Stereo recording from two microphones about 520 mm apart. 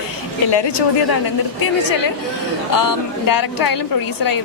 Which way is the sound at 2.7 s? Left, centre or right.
Left.